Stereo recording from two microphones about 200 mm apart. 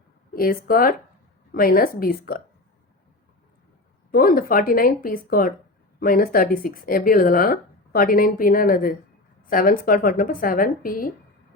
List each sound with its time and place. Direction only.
0.3 s speech: 45° left (ahead or behind)
4.1 s speech: 45° left (ahead or behind)